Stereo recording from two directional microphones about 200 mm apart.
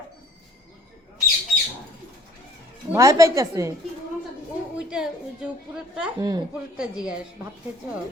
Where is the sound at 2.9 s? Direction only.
15° right (ahead or behind).